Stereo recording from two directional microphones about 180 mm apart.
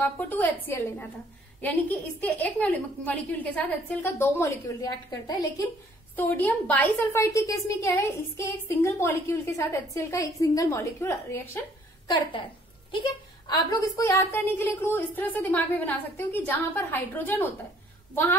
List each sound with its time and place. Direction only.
0.0 s a woman's voice: 10° left (ahead or behind)
12.1 s a woman's voice: 30° left (ahead or behind); by 17.5 s 10° left (ahead or behind)